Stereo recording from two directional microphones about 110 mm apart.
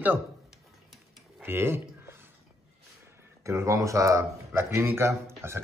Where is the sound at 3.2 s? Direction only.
25° right (ahead or behind).